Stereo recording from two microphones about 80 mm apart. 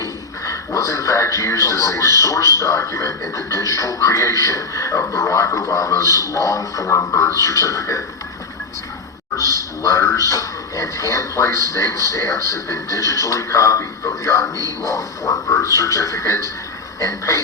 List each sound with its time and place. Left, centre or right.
0.0 s speech: left
9.3 s speech: left